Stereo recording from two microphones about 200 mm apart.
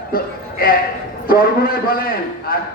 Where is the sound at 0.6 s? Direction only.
45° left (ahead or behind).